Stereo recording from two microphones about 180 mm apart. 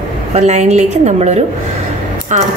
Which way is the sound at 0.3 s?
40° right (ahead or behind).